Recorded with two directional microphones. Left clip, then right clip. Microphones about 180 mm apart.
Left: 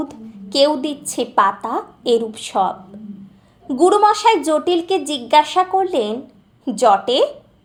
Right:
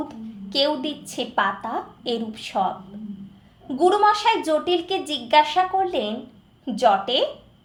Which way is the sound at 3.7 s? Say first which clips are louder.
Left 5 dB; 30° left (ahead or behind).